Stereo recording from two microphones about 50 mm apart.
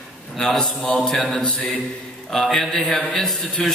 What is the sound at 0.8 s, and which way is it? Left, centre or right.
Mantra, left.